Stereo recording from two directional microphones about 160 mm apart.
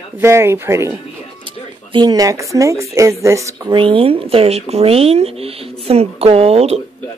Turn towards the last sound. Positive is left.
turn(degrees=-40)  # may be behind; listen again after turning